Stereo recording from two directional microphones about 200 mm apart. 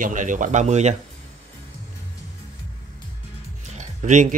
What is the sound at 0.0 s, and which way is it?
Speech, 40° right (ahead or behind).